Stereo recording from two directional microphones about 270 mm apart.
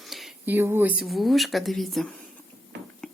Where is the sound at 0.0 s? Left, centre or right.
Centre.